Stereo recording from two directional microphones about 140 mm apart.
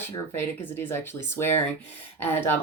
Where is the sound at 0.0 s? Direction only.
15° left (ahead or behind).